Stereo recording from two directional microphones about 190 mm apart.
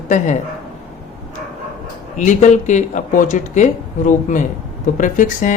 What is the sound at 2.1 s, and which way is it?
A woman's voice, 40° left (ahead or behind).